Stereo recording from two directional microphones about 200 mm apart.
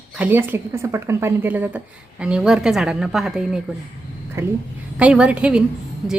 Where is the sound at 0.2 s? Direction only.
10° right (ahead or behind).